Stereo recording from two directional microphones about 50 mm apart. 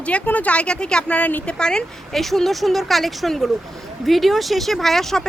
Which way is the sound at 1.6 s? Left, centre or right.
Centre.